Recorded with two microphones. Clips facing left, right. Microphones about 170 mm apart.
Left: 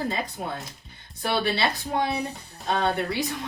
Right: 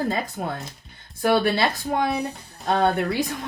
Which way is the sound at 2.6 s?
45° right (ahead or behind).